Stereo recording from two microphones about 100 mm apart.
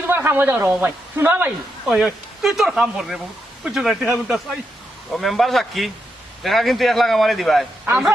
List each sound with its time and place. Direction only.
0.1 s speech: 20° right (ahead or behind)
1.9 s a man's voice: 5° right (ahead or behind)